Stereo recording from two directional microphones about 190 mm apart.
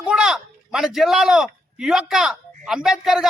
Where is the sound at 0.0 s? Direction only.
5° right (ahead or behind).